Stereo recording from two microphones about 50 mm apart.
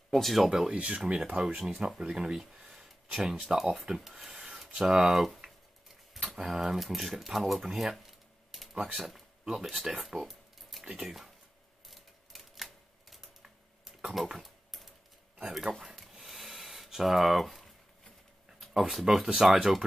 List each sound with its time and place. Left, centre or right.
0.1 s speech: centre
0.5 s speech: centre
0.7 s speech: right; by 7.6 s centre
7.6 s a sound: centre
8.9 s speech: centre
11.9 s typewriter: centre
13.8 s typing: centre
15.8 s a sound: centre
18.7 s speech: centre